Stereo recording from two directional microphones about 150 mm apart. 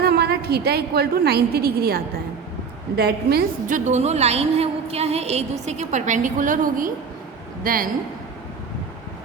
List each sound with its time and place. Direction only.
0.0 s a woman's voice: 90° right; by 7.9 s 70° right (ahead or behind)